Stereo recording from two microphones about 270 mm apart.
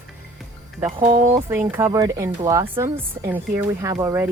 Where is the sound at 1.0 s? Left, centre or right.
Right.